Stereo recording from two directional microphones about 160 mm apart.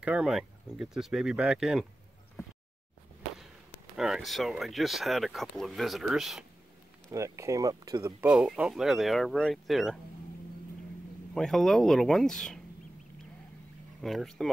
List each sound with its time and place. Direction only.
0.0 s speech: 5° right (ahead or behind)
3.9 s speech: 5° right (ahead or behind)
7.1 s speech: 20° right (ahead or behind)
8.2 s speech: 5° right (ahead or behind)
11.3 s speech: centre (ahead or behind)
14.0 s speech: centre (ahead or behind)